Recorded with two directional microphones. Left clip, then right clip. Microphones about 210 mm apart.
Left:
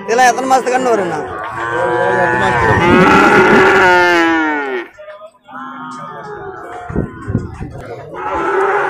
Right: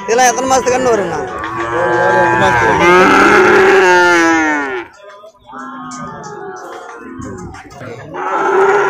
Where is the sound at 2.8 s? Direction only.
45° right (ahead or behind); by 4.7 s 15° right (ahead or behind).